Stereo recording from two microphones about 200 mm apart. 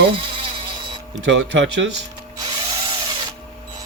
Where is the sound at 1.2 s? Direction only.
65° right (ahead or behind).